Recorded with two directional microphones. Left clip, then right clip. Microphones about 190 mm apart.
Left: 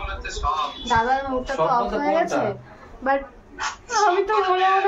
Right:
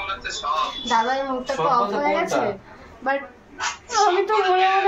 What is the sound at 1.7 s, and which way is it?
Speech, 5° left (ahead or behind).